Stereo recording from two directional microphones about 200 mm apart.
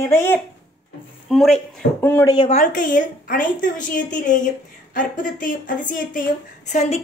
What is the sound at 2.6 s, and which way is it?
A woman's voice, 40° left (ahead or behind).